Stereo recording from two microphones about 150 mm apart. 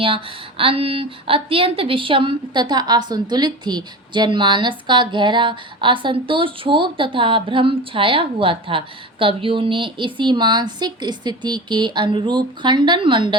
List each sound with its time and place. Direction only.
0.0 s a woman's voice: 35° right (ahead or behind)